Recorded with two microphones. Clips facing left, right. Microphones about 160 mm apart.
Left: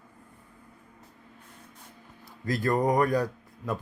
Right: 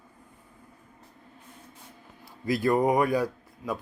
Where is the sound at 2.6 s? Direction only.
10° right (ahead or behind).